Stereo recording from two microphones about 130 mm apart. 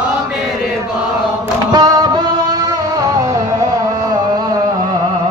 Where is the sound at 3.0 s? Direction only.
25° right (ahead or behind).